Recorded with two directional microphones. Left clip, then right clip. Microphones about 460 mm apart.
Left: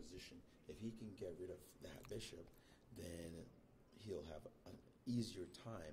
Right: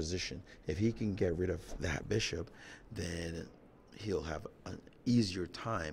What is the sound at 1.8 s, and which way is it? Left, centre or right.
Speech, right.